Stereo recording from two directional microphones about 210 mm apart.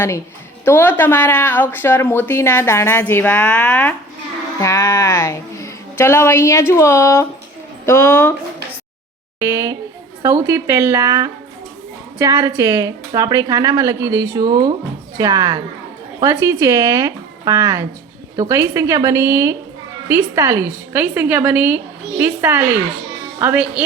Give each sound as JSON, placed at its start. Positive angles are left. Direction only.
{"t": 0.6, "sound": "speech", "side_deg": 10}
{"t": 9.4, "sound": "a woman's voice", "side_deg": -15}